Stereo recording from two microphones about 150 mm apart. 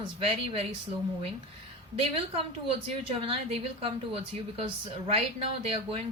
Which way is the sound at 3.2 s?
40° right (ahead or behind).